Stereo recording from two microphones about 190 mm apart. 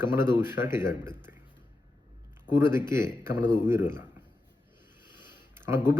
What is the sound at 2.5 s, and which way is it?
A man's voice, 10° right (ahead or behind).